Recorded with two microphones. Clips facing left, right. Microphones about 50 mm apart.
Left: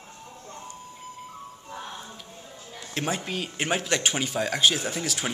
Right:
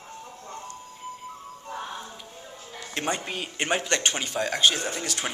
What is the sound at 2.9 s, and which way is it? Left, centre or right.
Speech, centre.